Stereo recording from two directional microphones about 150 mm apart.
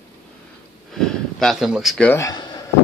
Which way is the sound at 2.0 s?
20° left (ahead or behind).